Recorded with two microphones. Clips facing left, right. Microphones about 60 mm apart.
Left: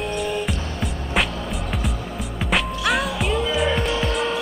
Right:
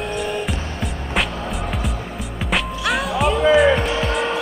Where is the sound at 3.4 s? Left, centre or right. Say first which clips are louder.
Right 12 dB; right.